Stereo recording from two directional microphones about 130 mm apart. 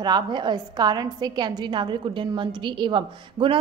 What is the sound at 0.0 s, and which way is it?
A woman's voice, 35° right (ahead or behind).